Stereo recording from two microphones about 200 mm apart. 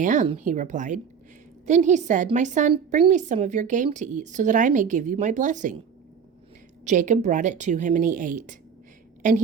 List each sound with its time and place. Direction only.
0.0 s speech: 40° right (ahead or behind)
6.8 s speech: 40° right (ahead or behind)